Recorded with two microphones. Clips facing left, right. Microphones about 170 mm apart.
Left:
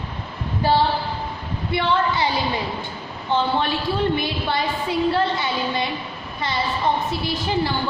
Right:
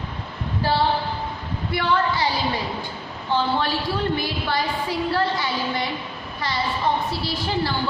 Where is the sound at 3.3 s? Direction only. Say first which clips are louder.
Left 1 dB; 20° left (ahead or behind).